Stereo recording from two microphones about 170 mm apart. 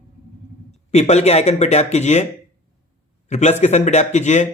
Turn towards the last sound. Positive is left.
turn(degrees=45)  # may be behind; listen again after turning